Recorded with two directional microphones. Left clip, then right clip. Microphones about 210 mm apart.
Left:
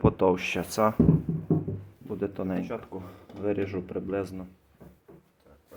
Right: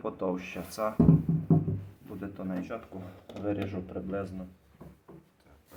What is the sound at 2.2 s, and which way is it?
Speech, 45° left (ahead or behind).